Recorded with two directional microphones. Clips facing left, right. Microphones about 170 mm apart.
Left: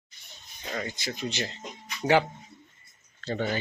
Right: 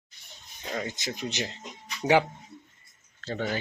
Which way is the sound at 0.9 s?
20° right (ahead or behind).